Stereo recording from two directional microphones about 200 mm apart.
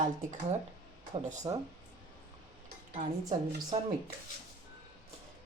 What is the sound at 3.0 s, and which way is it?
Speech, 20° right (ahead or behind).